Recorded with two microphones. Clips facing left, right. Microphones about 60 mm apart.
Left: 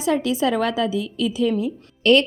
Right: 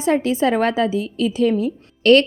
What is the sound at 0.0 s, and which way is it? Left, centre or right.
A woman's voice, right.